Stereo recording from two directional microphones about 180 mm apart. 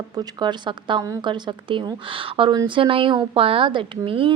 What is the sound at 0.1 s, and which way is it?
A woman's voice, 25° right (ahead or behind).